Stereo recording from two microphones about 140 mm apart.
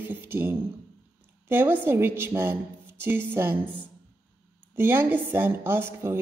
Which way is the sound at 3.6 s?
10° left (ahead or behind).